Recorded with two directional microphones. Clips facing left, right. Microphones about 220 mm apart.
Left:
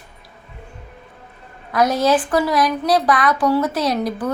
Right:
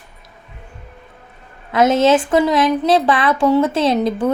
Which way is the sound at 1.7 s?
25° right (ahead or behind).